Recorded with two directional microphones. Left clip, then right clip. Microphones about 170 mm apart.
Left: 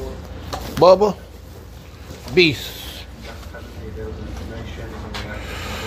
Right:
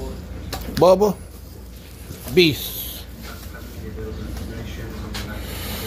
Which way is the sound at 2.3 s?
15° right (ahead or behind).